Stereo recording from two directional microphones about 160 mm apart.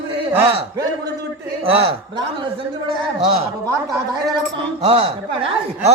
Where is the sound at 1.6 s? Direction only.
35° right (ahead or behind).